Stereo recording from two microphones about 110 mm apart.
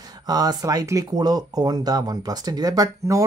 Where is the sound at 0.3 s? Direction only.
35° right (ahead or behind).